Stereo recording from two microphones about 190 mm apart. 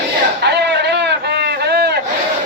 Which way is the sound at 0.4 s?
65° right (ahead or behind).